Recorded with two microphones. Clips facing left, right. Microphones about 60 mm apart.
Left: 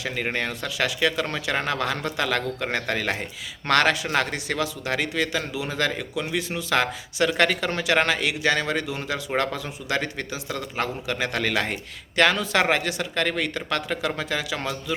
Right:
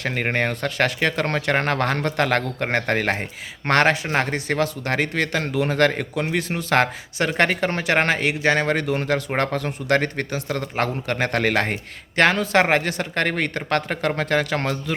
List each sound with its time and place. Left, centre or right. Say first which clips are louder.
0.0 s speech: right 4 dB; right